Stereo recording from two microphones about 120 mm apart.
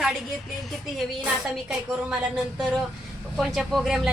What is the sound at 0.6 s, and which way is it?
Speech, centre (ahead or behind).